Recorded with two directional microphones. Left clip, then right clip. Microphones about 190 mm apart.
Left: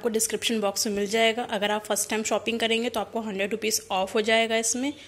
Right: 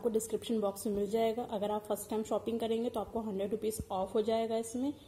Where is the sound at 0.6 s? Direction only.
25° left (ahead or behind).